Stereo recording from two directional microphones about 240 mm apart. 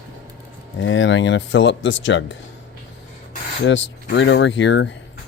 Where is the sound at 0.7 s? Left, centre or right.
Left.